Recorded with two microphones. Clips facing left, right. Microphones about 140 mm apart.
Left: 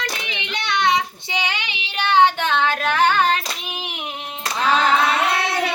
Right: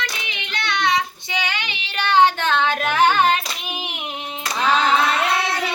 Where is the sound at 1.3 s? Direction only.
30° left (ahead or behind).